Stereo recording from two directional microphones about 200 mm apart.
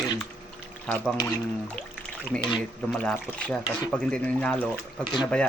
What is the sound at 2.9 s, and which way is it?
Speech, 5° left (ahead or behind).